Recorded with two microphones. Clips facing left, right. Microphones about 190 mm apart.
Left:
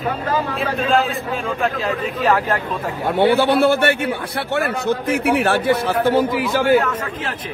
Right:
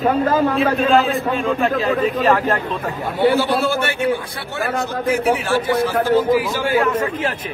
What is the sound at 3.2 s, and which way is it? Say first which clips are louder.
A man's voice: left 2 dB; 65° left (ahead or behind).